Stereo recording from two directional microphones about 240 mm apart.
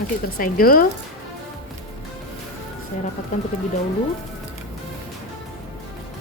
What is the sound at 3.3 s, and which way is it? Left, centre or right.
Speech, left.